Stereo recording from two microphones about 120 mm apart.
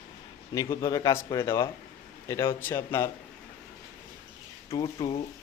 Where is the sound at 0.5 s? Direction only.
30° left (ahead or behind).